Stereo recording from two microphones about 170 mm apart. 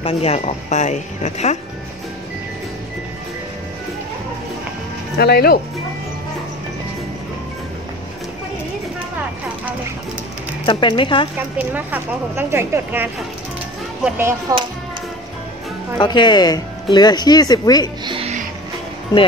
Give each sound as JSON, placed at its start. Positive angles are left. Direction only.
{"t": 0.0, "sound": "speech", "side_deg": 35}
{"t": 5.1, "sound": "speech", "side_deg": 65}
{"t": 10.6, "sound": "speech", "side_deg": 30}
{"t": 11.5, "sound": "speech", "side_deg": -10}
{"t": 16.0, "sound": "speech", "side_deg": 25}
{"t": 18.0, "sound": "music", "side_deg": -30}